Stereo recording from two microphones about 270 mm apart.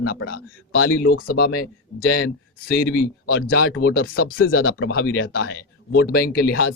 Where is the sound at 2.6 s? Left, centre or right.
Left.